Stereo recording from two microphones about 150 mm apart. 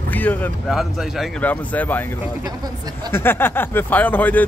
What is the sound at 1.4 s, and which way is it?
Speech, 10° left (ahead or behind).